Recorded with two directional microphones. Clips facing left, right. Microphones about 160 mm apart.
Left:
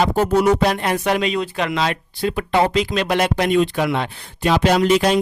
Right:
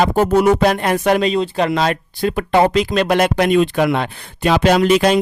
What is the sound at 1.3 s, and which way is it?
Speech, 30° right (ahead or behind).